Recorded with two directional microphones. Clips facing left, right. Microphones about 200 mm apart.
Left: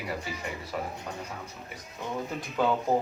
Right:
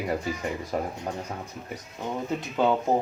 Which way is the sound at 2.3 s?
25° right (ahead or behind).